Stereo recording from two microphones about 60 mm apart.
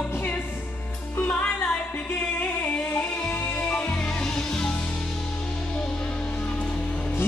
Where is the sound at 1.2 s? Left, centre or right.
Centre.